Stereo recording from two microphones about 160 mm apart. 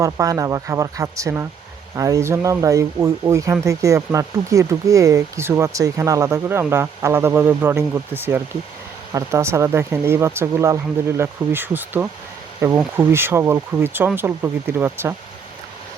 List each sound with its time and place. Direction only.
0.0 s speech: 20° right (ahead or behind)